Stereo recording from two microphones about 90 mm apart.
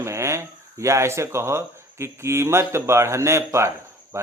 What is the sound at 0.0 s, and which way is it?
Speech, 30° right (ahead or behind).